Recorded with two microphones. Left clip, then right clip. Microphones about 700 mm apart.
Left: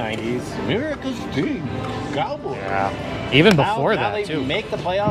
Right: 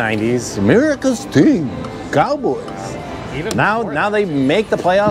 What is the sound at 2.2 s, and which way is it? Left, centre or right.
Speech, right.